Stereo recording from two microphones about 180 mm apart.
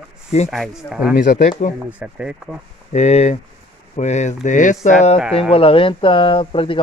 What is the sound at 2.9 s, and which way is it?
Speech, 40° left (ahead or behind).